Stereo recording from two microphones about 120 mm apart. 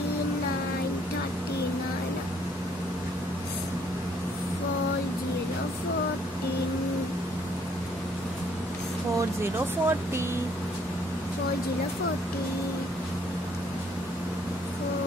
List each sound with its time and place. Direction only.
9.4 s speech: 20° right (ahead or behind)